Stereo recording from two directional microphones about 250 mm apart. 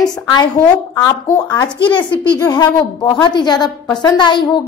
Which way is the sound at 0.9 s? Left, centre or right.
Centre.